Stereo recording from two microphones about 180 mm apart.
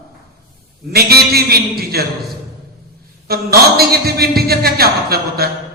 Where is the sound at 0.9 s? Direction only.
60° right (ahead or behind).